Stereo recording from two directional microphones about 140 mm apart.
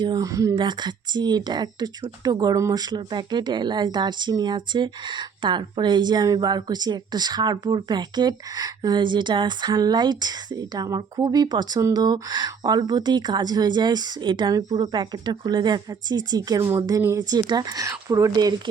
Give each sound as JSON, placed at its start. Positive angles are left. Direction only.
{"t": 0.0, "sound": "speech", "side_deg": -30}